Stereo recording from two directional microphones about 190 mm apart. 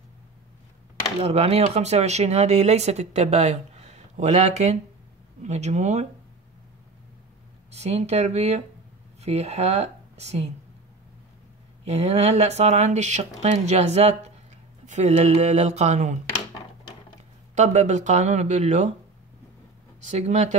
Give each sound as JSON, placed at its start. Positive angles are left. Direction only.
{"t": 1.2, "sound": "speech", "side_deg": -35}
{"t": 7.7, "sound": "speech", "side_deg": -35}
{"t": 11.8, "sound": "speech", "side_deg": -35}
{"t": 17.6, "sound": "speech", "side_deg": -40}
{"t": 20.1, "sound": "speech", "side_deg": -35}